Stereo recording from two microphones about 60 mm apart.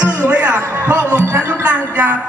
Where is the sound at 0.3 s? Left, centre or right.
Right.